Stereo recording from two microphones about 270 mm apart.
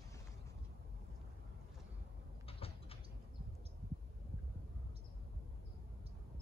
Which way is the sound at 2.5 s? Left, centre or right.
Left.